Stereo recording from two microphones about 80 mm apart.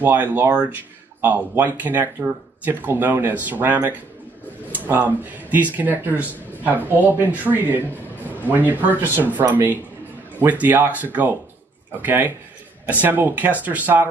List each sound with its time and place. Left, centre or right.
0.0 s speech: right